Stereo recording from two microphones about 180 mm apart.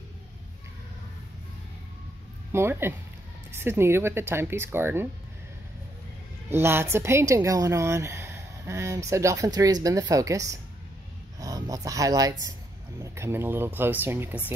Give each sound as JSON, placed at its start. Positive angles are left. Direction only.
{"t": 2.5, "sound": "a woman's voice", "side_deg": -15}
{"t": 6.5, "sound": "a woman's voice", "side_deg": -15}